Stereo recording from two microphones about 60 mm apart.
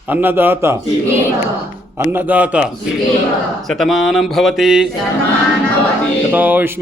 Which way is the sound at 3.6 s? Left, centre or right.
Centre.